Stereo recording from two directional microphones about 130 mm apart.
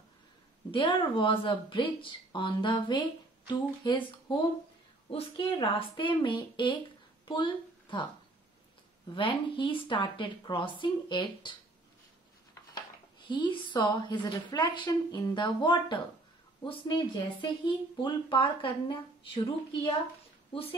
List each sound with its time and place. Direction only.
0.7 s speech: 40° left (ahead or behind)
9.1 s speech: 40° left (ahead or behind)
13.3 s speech: 35° left (ahead or behind)